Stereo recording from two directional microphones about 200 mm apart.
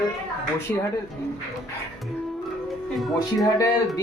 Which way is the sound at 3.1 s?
20° left (ahead or behind).